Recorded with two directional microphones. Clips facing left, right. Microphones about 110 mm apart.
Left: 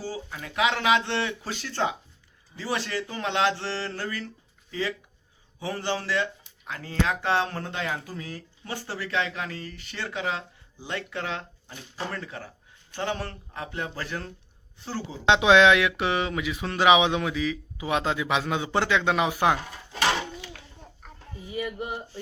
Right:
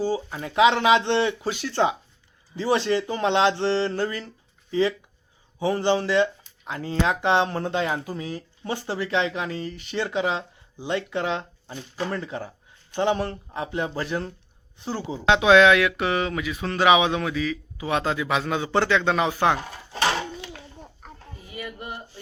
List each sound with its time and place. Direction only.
0.0 s speech: 25° right (ahead or behind)
15.3 s speech: 20° left (ahead or behind)
19.9 s a sound: 35° right (ahead or behind)
21.4 s speech: 20° left (ahead or behind)